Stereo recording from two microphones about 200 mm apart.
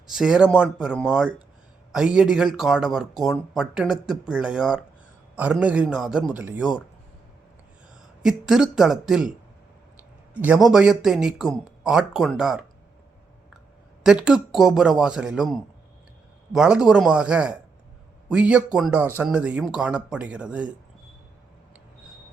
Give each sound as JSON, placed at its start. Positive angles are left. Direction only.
{"t": 0.1, "sound": "speech", "side_deg": -5}
{"t": 8.2, "sound": "speech", "side_deg": 0}
{"t": 10.3, "sound": "speech", "side_deg": -5}
{"t": 14.0, "sound": "speech", "side_deg": -5}